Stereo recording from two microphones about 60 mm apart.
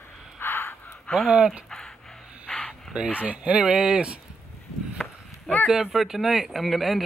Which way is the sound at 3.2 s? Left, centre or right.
Right.